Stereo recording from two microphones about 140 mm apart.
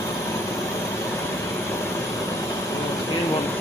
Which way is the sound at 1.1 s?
20° left (ahead or behind).